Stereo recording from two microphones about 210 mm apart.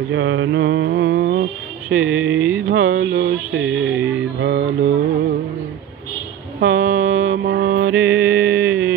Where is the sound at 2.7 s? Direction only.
60° right (ahead or behind).